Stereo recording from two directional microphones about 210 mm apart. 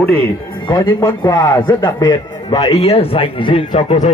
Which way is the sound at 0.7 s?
20° left (ahead or behind).